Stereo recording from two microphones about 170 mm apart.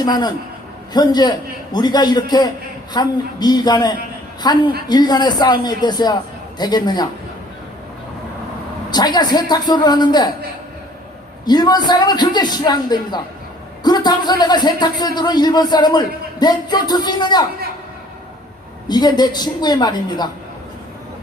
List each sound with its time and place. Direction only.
0.0 s speech: 25° left (ahead or behind)
8.9 s speech: 25° left (ahead or behind)
11.4 s speech: 25° left (ahead or behind)
18.9 s speech: 25° left (ahead or behind)